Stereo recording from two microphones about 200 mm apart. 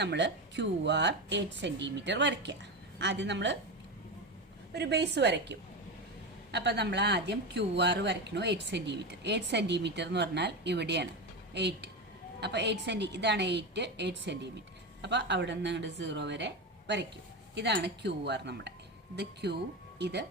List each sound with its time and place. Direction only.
0.0 s speech: 60° right (ahead or behind)
4.7 s speech: 55° right (ahead or behind)